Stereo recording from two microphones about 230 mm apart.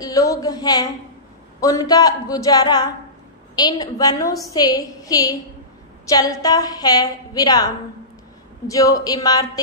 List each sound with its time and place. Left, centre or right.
0.0 s a woman's voice: centre